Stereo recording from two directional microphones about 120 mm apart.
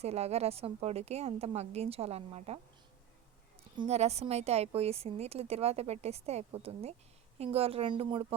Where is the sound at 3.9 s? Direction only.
65° right (ahead or behind).